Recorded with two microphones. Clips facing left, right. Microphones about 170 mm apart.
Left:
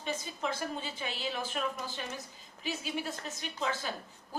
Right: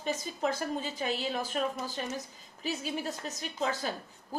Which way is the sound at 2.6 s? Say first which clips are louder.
Right 2 dB; 40° right (ahead or behind).